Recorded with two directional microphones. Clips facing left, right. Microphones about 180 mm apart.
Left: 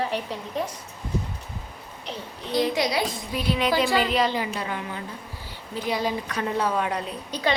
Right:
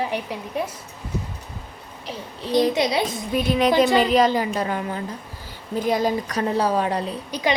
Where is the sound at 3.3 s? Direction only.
45° right (ahead or behind).